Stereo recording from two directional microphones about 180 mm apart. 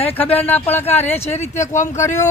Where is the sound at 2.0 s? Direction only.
15° left (ahead or behind).